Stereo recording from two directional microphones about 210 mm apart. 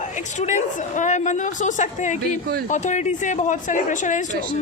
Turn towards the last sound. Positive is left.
turn(degrees=35)  # may be behind; listen again after turning